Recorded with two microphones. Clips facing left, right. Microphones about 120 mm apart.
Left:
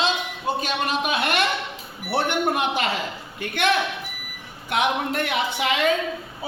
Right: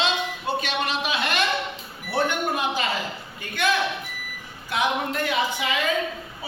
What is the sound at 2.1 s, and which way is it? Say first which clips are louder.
A woman's voice: left 2 dB; 65° left (ahead or behind).